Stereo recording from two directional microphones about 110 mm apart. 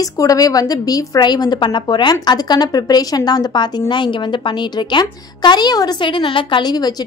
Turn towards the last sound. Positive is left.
turn(degrees=40)  # may be behind; listen again after turning